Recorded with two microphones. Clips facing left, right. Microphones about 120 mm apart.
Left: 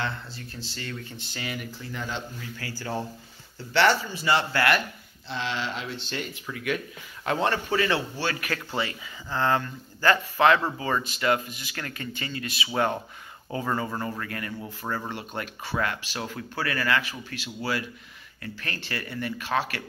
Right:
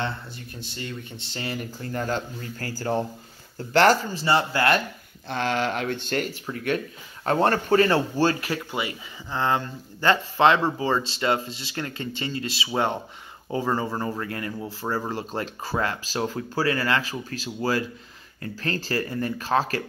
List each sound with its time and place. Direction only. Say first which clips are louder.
0.6 s speech: right 2 dB; 20° right (ahead or behind)
1.8 s speech: right 6 dB; 45° right (ahead or behind)
4.3 s speech: right 2 dB; 20° right (ahead or behind)
5.3 s speech: right 6 dB; 50° right (ahead or behind)
6.5 s speech: right 3 dB; 35° right (ahead or behind)
8.7 s speech: even; 20° right (ahead or behind); by 19.8 s 35° right (ahead or behind)